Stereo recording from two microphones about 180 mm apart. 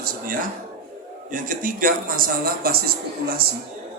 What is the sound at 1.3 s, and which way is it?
A man's voice, 50° right (ahead or behind).